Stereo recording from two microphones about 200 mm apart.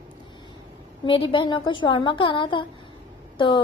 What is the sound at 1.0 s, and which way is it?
A woman's voice, 25° left (ahead or behind).